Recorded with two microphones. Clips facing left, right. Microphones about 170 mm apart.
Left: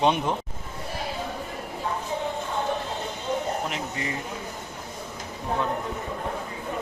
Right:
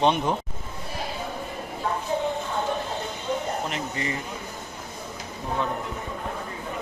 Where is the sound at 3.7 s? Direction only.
5° left (ahead or behind).